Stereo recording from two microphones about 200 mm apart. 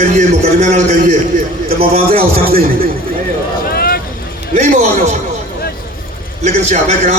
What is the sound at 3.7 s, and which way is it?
Vehicle, 50° left (ahead or behind).